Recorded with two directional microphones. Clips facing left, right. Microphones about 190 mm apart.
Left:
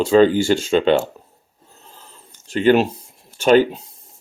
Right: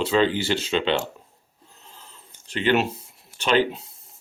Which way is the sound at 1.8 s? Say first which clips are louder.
Left 3 dB; 45° left (ahead or behind).